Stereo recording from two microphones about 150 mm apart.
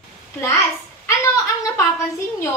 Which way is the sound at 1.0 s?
20° left (ahead or behind).